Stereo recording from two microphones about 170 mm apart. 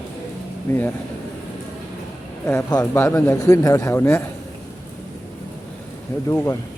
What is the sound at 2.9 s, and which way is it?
Speech, 15° left (ahead or behind).